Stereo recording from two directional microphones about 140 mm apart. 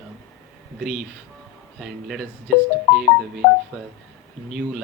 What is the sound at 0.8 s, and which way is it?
Speech, 55° left (ahead or behind).